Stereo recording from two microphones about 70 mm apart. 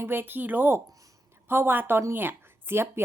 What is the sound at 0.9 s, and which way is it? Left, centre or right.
Speech, right.